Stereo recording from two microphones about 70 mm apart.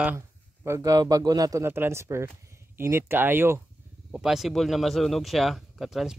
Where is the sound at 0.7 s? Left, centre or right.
Right.